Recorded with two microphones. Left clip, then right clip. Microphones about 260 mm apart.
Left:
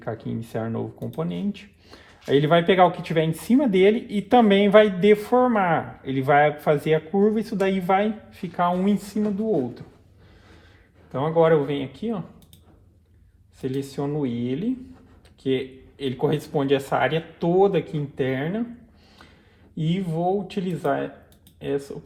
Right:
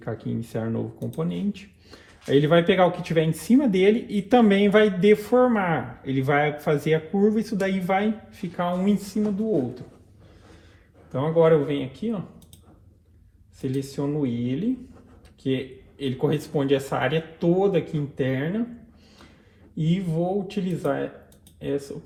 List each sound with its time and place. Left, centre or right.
0.0 s speech: left
11.1 s speech: left
13.6 s speech: left
19.7 s speech: left